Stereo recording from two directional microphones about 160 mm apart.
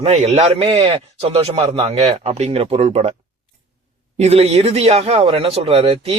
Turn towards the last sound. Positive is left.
turn(degrees=-40)  # may be behind; listen again after turning